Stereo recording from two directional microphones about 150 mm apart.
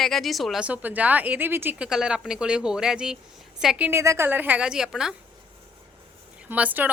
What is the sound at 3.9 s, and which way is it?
A woman's voice, 15° right (ahead or behind).